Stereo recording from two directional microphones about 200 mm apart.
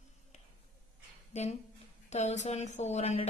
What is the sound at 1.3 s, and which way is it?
A woman's voice, 35° left (ahead or behind).